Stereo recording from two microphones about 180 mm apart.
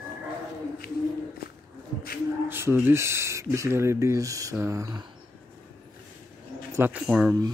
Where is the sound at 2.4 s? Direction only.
10° right (ahead or behind).